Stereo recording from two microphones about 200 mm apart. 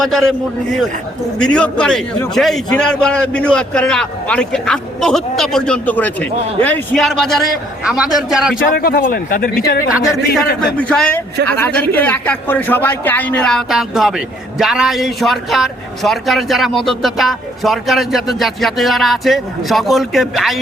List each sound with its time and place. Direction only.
0.0 s a man's voice: centre (ahead or behind)
8.7 s speech: 50° left (ahead or behind)
10.8 s a man's voice: 5° left (ahead or behind)